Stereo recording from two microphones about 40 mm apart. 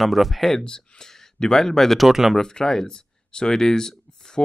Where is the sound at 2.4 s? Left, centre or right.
Centre.